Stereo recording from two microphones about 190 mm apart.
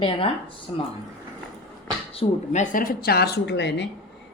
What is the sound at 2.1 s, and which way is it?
A woman's voice, 40° left (ahead or behind).